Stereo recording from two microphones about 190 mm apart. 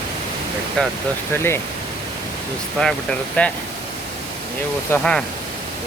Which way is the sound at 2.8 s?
5° left (ahead or behind).